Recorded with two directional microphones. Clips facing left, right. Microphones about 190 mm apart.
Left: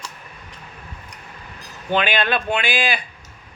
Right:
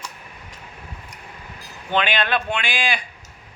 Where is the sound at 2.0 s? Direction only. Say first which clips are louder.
Left 1 dB; 40° left (ahead or behind).